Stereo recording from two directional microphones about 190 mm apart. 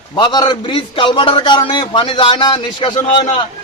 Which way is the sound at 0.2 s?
25° left (ahead or behind).